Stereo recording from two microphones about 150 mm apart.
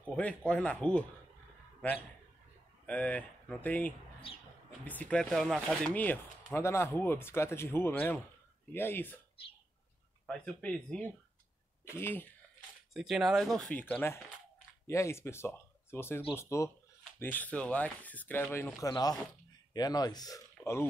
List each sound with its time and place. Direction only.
0.0 s speech: 10° left (ahead or behind)
2.9 s speech: 10° left (ahead or behind)
10.2 s speech: 10° left (ahead or behind)
12.9 s speech: centre (ahead or behind)
18.8 s speech: 25° left (ahead or behind)